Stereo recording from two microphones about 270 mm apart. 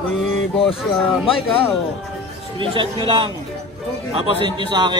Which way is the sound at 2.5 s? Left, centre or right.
Centre.